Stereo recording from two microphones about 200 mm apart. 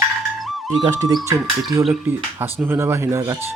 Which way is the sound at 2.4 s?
10° right (ahead or behind).